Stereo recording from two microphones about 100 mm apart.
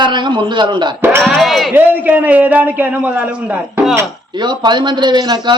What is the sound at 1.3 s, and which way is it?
Speech, centre (ahead or behind).